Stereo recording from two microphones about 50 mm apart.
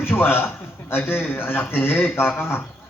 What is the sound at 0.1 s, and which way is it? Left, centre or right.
A man's voice, left.